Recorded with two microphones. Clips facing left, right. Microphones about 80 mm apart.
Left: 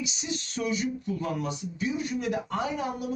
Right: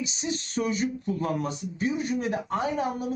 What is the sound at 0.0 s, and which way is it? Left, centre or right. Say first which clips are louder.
Speech: right 3 dB; right.